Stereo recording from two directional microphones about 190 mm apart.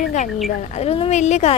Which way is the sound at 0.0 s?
40° left (ahead or behind).